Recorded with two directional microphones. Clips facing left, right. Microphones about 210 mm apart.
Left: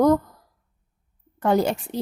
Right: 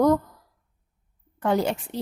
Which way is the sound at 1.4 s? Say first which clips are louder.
Left 3 dB; 40° left (ahead or behind).